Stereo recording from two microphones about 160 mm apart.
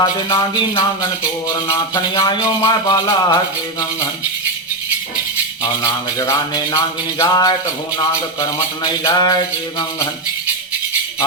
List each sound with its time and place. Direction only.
0.0 s mantra: 25° left (ahead or behind)
2.1 s mantra: 25° left (ahead or behind)
5.6 s mantra: 20° left (ahead or behind)